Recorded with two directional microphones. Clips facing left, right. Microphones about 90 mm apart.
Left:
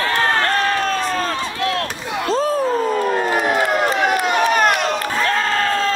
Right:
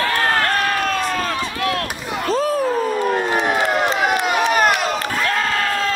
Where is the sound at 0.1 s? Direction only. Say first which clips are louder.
Left 1 dB; 30° left (ahead or behind).